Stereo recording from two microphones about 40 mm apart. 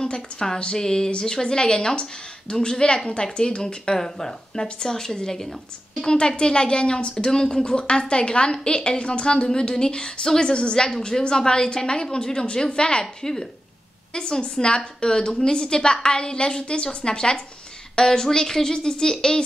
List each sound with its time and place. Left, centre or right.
0.0 s a woman's voice: centre
6.0 s a woman's voice: left
7.2 s a woman's voice: centre
13.0 s speech: centre
14.1 s a woman's voice: left